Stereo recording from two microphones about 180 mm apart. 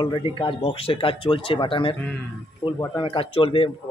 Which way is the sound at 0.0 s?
25° left (ahead or behind).